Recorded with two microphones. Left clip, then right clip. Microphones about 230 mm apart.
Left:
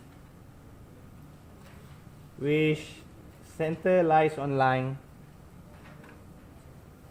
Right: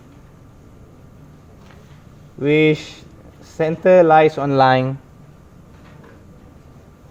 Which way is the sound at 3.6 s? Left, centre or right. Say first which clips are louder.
Right 13 dB; right.